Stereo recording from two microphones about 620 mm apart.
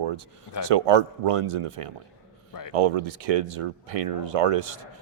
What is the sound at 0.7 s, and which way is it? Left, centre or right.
A man's voice, right.